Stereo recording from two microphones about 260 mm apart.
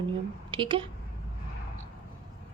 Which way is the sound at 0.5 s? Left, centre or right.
Centre.